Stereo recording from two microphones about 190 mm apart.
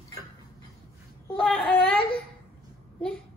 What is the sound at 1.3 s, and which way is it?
Speech, centre (ahead or behind).